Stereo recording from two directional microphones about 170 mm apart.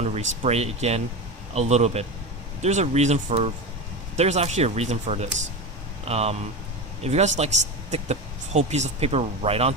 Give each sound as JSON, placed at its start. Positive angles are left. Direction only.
{"t": 0.0, "sound": "speech", "side_deg": -40}